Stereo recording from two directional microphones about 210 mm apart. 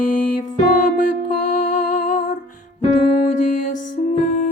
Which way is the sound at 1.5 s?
40° left (ahead or behind).